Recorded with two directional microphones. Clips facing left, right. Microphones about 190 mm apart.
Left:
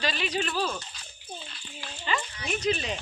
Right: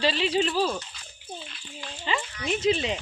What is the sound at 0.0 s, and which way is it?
Speech, 30° right (ahead or behind).